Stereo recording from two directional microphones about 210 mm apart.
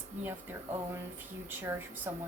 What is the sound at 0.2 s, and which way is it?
A woman's voice, 10° right (ahead or behind).